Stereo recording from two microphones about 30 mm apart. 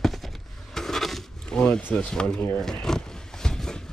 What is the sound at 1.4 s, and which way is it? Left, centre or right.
Speech, left.